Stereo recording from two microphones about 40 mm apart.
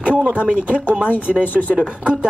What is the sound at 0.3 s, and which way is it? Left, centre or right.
Speech, right.